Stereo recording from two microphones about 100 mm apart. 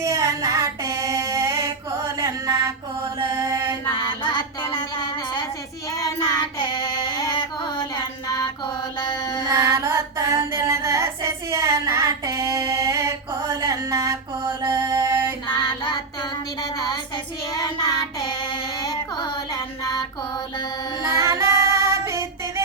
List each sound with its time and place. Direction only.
0.0 s child singing: 35° right (ahead or behind)
2.1 s mantra: 35° right (ahead or behind)
3.3 s music: 35° right (ahead or behind)
3.9 s child singing: 50° left (ahead or behind)
5.9 s child singing: 35° left (ahead or behind)
6.6 s a sound: 45° left (ahead or behind)
8.3 s mantra: 45° left (ahead or behind)
9.5 s female singing: 40° right (ahead or behind)
14.6 s music: 30° right (ahead or behind)
15.4 s child singing: 50° left (ahead or behind)
16.7 s a sound: 40° left (ahead or behind)
17.5 s child singing: 35° left (ahead or behind)
18.8 s a sound: 45° left (ahead or behind)
21.2 s female singing: 30° right (ahead or behind)